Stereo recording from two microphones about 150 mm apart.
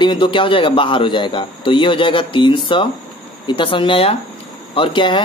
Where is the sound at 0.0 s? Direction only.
30° left (ahead or behind).